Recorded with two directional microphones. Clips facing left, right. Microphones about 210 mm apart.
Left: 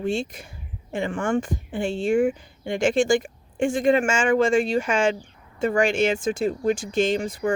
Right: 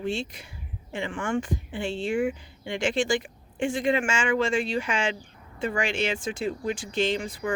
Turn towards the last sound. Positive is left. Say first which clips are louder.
# left 5 dB
turn(degrees=45)  # may be behind; listen again after turning